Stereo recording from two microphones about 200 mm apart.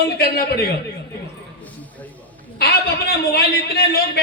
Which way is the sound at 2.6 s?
50° left (ahead or behind).